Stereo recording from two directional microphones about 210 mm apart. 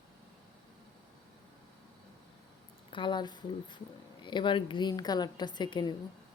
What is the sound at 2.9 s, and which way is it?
A woman's voice, 20° left (ahead or behind).